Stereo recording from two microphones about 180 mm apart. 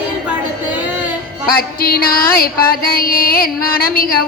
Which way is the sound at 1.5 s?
55° left (ahead or behind).